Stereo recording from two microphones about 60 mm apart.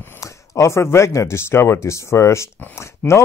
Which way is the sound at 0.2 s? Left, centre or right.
Left.